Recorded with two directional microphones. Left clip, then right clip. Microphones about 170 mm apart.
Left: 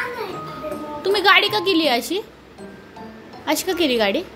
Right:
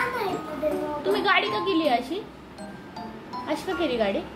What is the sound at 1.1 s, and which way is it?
A woman's voice, 25° left (ahead or behind).